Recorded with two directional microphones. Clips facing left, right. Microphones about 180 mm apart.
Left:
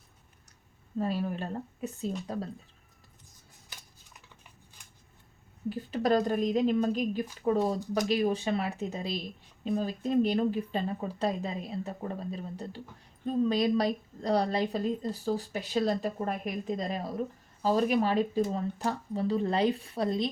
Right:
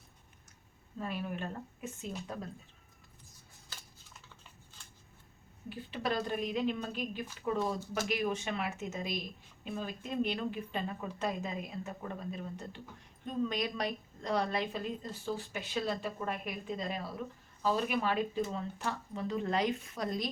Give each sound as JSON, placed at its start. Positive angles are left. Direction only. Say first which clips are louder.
{"t": 0.9, "sound": "a woman's voice", "louder": "left 7 dB", "side_deg": 35}
{"t": 3.7, "sound": "cutlery", "louder": "left 1 dB", "side_deg": 15}
{"t": 4.8, "sound": "a sound", "louder": "right 3 dB", "side_deg": 15}
{"t": 5.6, "sound": "a woman's voice", "louder": "left 8 dB", "side_deg": 40}